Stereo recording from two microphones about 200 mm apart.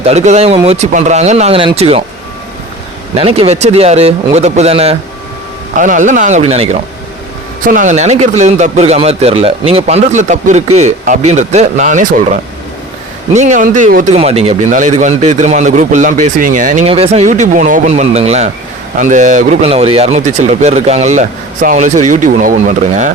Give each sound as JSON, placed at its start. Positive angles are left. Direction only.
{"t": 0.0, "sound": "speech", "side_deg": -35}
{"t": 3.2, "sound": "speech", "side_deg": -30}
{"t": 7.6, "sound": "speech", "side_deg": -40}